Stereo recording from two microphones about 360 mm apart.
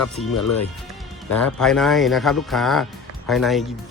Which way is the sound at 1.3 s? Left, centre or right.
Centre.